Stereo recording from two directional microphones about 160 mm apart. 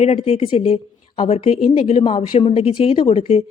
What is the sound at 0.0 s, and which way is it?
A woman's voice, 40° left (ahead or behind).